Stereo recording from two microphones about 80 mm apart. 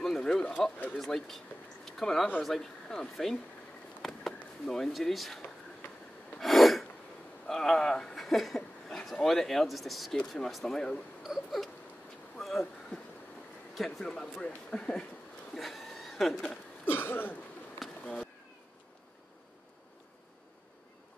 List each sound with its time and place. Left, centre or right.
0.0 s bird: centre
0.9 s speech: centre
4.0 s a sound: centre
6.4 s gasp: centre
7.4 s speech: centre
15.5 s chuckle: centre
16.8 s cough: left
17.8 s bee: centre